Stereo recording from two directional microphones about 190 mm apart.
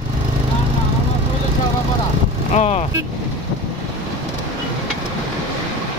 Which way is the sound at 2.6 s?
35° left (ahead or behind).